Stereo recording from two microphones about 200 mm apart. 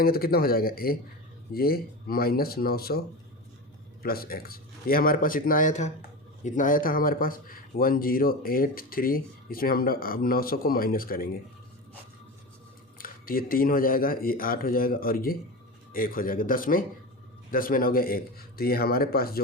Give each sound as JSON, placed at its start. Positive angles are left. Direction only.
{"t": 0.0, "sound": "speech", "side_deg": 50}
{"t": 4.0, "sound": "speech", "side_deg": 50}
{"t": 13.0, "sound": "speech", "side_deg": 45}